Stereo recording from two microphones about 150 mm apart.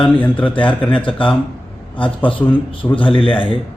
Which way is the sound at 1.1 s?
35° left (ahead or behind).